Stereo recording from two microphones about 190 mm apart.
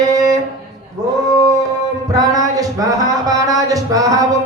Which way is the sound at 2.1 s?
20° right (ahead or behind).